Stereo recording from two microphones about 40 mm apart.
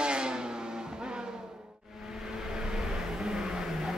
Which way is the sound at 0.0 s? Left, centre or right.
Right.